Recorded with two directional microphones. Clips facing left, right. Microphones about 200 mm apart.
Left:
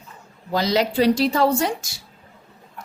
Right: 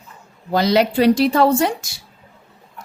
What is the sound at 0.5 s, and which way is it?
A woman's voice, 60° right (ahead or behind).